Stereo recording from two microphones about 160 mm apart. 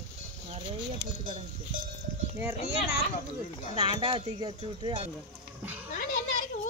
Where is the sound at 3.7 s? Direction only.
35° right (ahead or behind).